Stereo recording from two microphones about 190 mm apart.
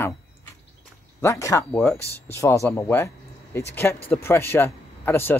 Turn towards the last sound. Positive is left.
turn(degrees=10)  # may be behind; listen again after turning